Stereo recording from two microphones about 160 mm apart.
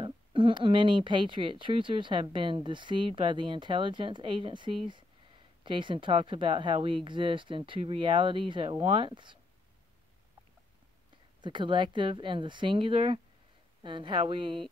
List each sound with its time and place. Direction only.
0.0 s speech: 30° right (ahead or behind)
11.4 s speech: 30° right (ahead or behind)